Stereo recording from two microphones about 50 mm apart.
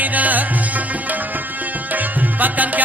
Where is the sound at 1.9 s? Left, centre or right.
Right.